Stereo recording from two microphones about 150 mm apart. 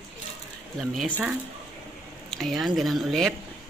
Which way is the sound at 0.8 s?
Centre (ahead or behind).